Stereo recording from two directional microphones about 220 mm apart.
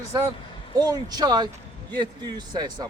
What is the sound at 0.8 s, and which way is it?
A man's voice, 15° right (ahead or behind).